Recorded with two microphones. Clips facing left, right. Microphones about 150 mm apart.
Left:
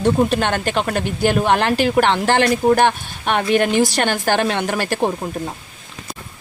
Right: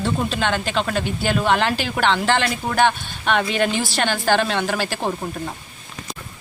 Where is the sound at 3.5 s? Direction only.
50° left (ahead or behind).